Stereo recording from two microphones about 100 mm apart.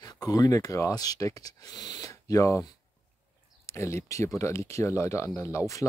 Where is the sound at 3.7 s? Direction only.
30° left (ahead or behind).